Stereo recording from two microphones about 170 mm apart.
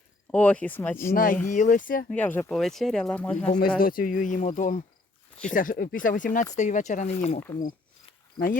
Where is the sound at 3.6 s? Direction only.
60° left (ahead or behind); by 7.4 s 40° left (ahead or behind).